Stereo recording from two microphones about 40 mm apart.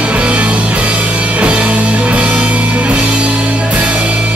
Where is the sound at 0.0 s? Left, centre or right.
Right.